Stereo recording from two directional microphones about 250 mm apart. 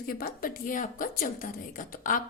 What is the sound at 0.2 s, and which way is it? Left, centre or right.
A woman's voice, left.